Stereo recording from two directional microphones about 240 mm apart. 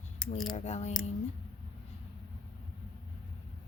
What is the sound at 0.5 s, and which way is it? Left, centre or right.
Speech, left.